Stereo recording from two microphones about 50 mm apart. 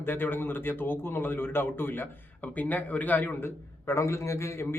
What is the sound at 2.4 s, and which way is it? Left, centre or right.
Speech, left.